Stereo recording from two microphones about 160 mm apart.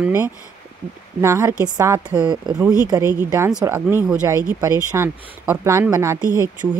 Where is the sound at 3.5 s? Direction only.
5° right (ahead or behind).